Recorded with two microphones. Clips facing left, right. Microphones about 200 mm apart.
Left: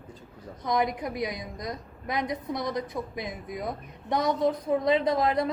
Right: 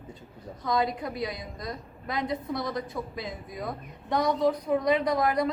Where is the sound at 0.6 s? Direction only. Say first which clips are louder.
Left 1 dB; 20° left (ahead or behind).